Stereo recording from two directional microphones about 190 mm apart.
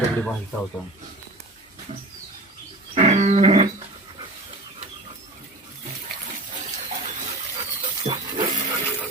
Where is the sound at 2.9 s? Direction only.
35° right (ahead or behind).